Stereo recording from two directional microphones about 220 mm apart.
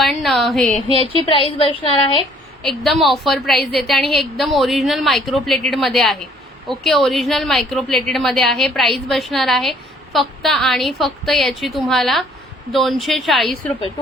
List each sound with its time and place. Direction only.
0.0 s a woman's voice: centre (ahead or behind)
0.9 s a woman's voice: 25° left (ahead or behind)
2.6 s a woman's voice: centre (ahead or behind)
3.6 s a woman's voice: 45° left (ahead or behind)
4.1 s a woman's voice: centre (ahead or behind)